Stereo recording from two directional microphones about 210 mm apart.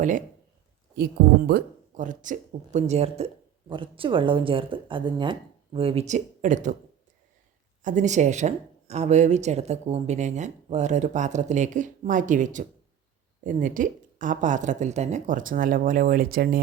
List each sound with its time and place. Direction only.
1.5 s speech: 45° right (ahead or behind)
7.9 s speech: 35° right (ahead or behind)